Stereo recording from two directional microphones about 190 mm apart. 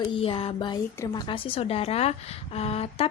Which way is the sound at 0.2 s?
30° left (ahead or behind).